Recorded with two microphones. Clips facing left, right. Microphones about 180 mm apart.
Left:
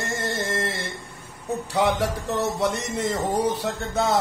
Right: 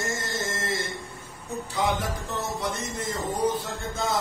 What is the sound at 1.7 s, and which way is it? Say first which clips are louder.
Speech: left 5 dB; 65° left (ahead or behind).